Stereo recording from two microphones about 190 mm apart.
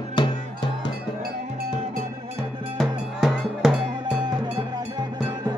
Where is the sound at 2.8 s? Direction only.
Centre (ahead or behind).